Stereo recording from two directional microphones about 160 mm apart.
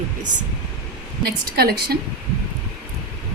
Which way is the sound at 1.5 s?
75° right (ahead or behind).